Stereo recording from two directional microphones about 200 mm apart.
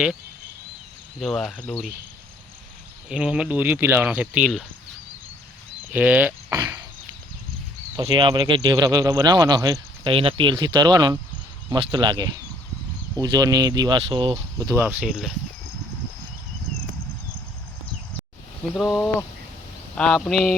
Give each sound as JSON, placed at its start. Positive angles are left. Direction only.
{"t": 1.2, "sound": "speech", "side_deg": 0}
{"t": 3.1, "sound": "speech", "side_deg": -5}
{"t": 5.9, "sound": "speech", "side_deg": -10}
{"t": 7.9, "sound": "speech", "side_deg": -25}
{"t": 18.7, "sound": "speech", "side_deg": 0}